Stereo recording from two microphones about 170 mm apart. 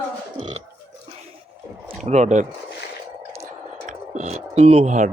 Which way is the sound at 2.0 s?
40° right (ahead or behind).